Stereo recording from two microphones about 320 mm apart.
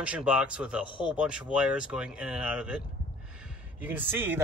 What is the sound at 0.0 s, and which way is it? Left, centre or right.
Speech, centre.